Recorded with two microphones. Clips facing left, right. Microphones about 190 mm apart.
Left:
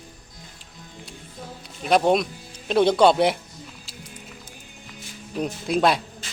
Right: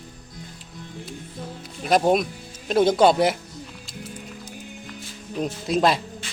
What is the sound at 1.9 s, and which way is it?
Speech, 5° right (ahead or behind).